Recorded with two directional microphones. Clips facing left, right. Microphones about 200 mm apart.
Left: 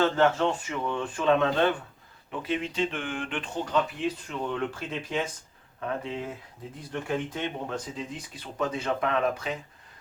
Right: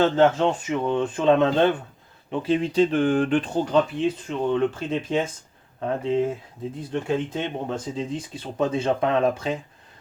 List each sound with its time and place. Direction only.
0.0 s speech: 20° right (ahead or behind)